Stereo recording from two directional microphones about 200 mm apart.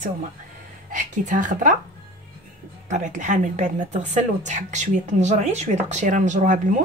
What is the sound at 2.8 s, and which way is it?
Speech, 40° right (ahead or behind).